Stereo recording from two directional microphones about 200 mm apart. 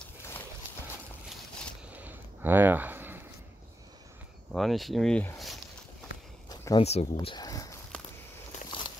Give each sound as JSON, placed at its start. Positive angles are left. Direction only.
{"t": 1.9, "sound": "a sound", "side_deg": -10}
{"t": 4.5, "sound": "speech", "side_deg": 0}
{"t": 6.8, "sound": "speech", "side_deg": 30}
{"t": 8.6, "sound": "walk", "side_deg": 25}